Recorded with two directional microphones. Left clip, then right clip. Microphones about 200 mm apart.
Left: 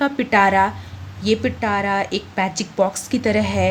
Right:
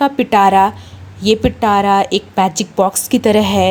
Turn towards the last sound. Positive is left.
turn(degrees=-35)  # may be behind; listen again after turning